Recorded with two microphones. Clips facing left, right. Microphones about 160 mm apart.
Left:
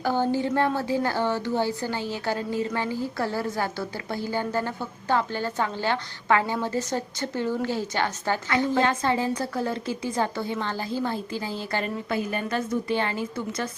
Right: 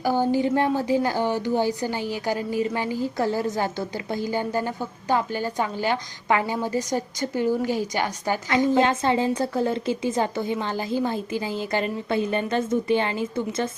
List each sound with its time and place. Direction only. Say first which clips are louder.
0.0 s a woman's voice: right 3 dB; 10° right (ahead or behind)